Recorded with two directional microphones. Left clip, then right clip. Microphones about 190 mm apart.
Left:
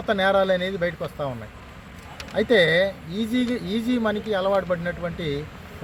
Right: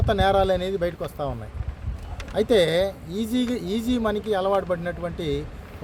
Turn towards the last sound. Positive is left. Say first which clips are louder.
# even
turn(degrees=-30)  # may be behind; listen again after turning